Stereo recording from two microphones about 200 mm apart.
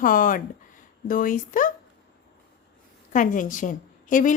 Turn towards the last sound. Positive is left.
turn(degrees=40)  # may be behind; listen again after turning